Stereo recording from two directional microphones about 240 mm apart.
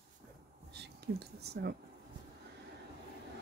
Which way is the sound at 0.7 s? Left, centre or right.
Right.